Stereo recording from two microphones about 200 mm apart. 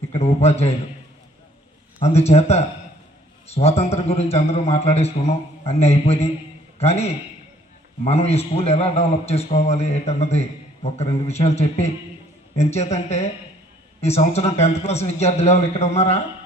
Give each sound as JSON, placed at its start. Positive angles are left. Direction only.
{"t": 0.1, "sound": "a man's voice", "side_deg": 30}
{"t": 2.0, "sound": "a man's voice", "side_deg": 35}